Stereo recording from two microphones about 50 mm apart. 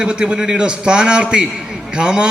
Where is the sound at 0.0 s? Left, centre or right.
Centre.